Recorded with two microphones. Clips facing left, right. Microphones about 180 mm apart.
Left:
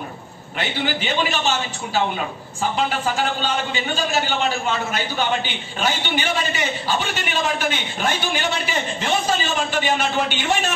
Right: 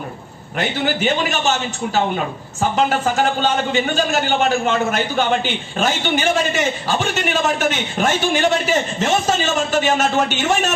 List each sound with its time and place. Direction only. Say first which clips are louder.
0.6 s a man's voice: right 4 dB; 45° right (ahead or behind)
2.7 s a man's voice: right 5 dB; 45° right (ahead or behind)